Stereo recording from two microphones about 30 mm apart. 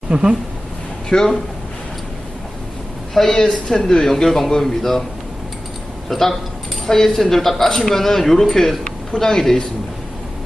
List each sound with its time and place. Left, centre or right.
0.1 s speech: right
1.1 s speech: centre
3.3 s speech: centre
6.1 s speech: centre